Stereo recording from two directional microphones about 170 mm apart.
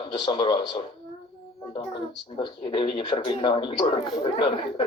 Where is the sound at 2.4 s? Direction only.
30° left (ahead or behind).